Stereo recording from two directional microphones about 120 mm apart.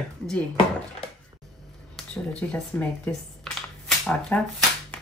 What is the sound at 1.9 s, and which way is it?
Speech, 10° left (ahead or behind).